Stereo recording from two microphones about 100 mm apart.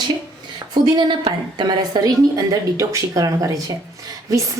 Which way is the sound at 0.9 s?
50° right (ahead or behind).